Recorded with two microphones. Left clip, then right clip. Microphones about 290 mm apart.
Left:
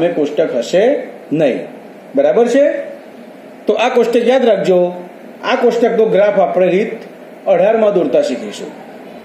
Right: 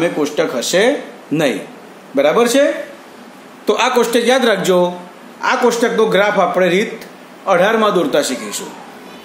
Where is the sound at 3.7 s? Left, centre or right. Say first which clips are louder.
Left 2 dB; right.